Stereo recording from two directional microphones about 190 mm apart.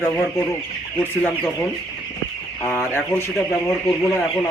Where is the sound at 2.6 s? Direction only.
10° left (ahead or behind).